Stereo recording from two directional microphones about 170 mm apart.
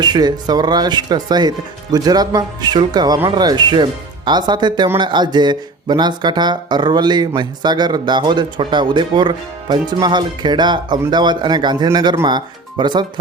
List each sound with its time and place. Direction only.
0.0 s speech: 25° right (ahead or behind)